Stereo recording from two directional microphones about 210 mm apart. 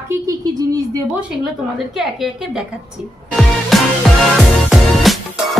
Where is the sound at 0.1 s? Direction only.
15° right (ahead or behind).